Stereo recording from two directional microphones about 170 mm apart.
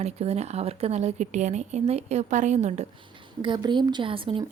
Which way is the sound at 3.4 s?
25° right (ahead or behind).